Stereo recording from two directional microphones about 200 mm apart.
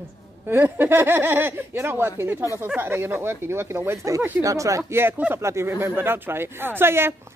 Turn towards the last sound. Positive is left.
turn(degrees=-10)  # may be behind; listen again after turning